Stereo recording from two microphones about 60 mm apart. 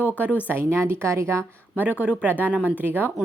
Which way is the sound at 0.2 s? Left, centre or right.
Right.